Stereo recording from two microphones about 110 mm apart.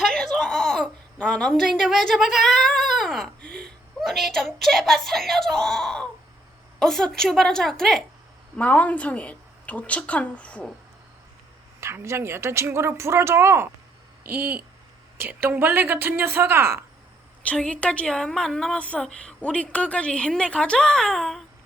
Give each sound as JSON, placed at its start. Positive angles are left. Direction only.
{"t": 0.0, "sound": "a woman's voice", "side_deg": 5}
{"t": 8.5, "sound": "a woman's voice", "side_deg": 15}
{"t": 11.8, "sound": "speech", "side_deg": -25}
{"t": 17.4, "sound": "a woman's voice", "side_deg": 10}